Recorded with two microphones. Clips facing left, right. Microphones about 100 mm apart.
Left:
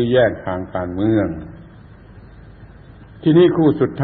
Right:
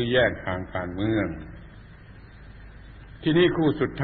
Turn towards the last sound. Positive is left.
turn(degrees=35)  # may be behind; listen again after turning